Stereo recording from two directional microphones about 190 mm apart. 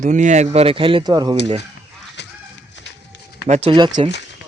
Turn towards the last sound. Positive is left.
turn(degrees=-25)  # may be behind; listen again after turning